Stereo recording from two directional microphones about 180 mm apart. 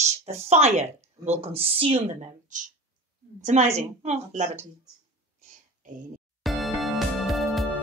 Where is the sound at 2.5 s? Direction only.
45° right (ahead or behind).